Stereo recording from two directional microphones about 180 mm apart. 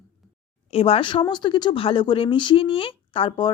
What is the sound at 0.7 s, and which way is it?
Speech, 30° left (ahead or behind).